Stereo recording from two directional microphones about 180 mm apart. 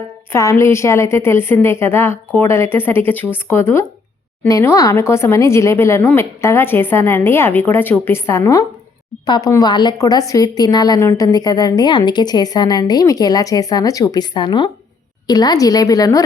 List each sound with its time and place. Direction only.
0.3 s a woman's voice: 15° left (ahead or behind)